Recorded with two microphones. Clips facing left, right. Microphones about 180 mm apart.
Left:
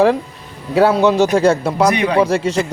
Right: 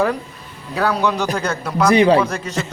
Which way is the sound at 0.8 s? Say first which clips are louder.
Left 7 dB; 25° left (ahead or behind).